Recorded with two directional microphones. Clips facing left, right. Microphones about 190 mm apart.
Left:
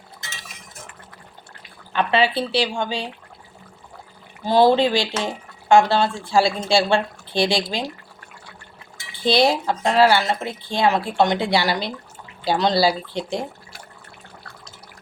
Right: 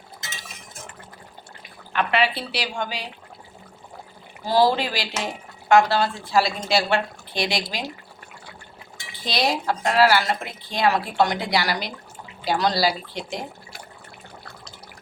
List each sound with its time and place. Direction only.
1.9 s speech: 30° left (ahead or behind)
4.4 s speech: 25° left (ahead or behind)
9.2 s speech: 30° left (ahead or behind)